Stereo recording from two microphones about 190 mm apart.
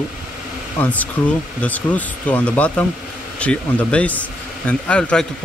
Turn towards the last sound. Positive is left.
turn(degrees=5)  # may be behind; listen again after turning